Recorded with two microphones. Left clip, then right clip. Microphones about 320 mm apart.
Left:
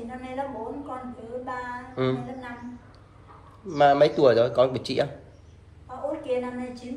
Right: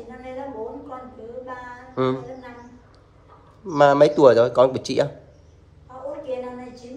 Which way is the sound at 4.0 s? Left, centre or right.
Centre.